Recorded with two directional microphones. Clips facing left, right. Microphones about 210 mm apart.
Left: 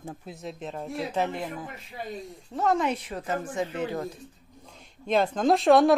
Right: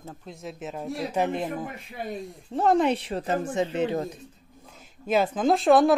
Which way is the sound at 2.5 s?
30° right (ahead or behind).